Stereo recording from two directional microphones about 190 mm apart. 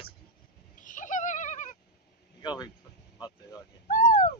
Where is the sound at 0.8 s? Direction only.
40° left (ahead or behind).